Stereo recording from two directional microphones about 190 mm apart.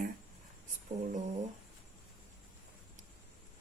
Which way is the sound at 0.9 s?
35° right (ahead or behind).